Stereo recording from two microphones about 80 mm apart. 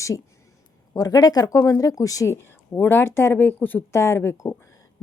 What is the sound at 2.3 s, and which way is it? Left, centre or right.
Speech, left.